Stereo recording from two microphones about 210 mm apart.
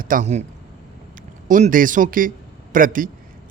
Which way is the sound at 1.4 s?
40° right (ahead or behind).